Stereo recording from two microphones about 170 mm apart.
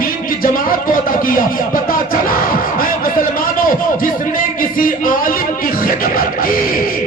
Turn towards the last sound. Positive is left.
turn(degrees=55)  # may be behind; listen again after turning